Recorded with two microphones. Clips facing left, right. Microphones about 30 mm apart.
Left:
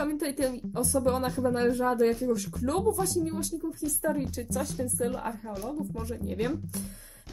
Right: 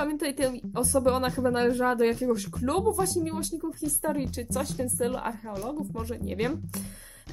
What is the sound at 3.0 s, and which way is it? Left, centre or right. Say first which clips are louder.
Speech: right 2 dB; centre.